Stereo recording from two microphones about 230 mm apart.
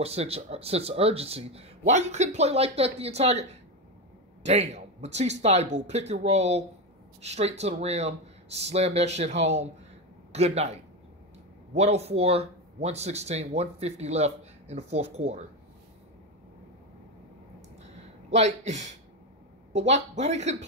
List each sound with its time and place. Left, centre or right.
0.0 s a man's voice: right
18.3 s speech: right